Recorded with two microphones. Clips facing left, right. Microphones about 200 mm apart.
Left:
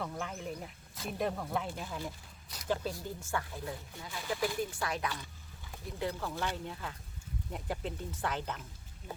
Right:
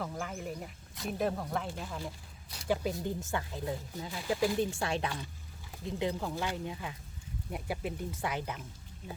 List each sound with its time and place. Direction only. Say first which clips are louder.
0.0 s speech: right 1 dB; centre (ahead or behind)
2.6 s speech: right 3 dB; 15° right (ahead or behind)